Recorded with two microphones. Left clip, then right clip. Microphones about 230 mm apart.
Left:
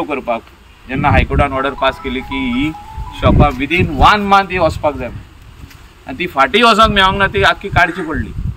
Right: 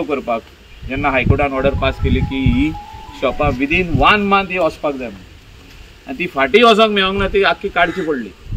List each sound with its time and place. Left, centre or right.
0.8 s speech: centre
6.1 s speech: centre